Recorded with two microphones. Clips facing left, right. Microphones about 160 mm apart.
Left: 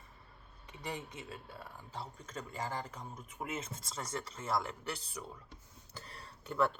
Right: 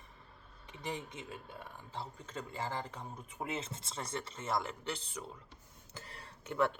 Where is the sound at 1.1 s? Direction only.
20° right (ahead or behind).